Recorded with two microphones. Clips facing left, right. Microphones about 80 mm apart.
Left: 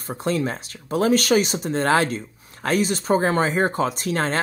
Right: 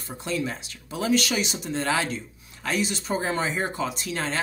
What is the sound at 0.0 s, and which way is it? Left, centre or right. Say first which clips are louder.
Speech: left 6 dB; left.